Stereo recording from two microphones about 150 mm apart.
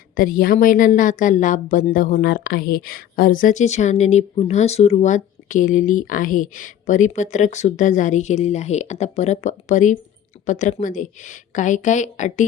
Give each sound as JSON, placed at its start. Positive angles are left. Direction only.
{"t": 0.2, "sound": "a woman's voice", "side_deg": 70}